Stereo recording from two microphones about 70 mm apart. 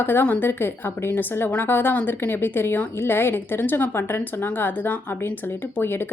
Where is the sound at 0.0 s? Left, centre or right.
Left.